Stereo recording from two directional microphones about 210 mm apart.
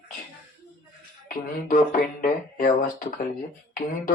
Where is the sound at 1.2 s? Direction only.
40° left (ahead or behind).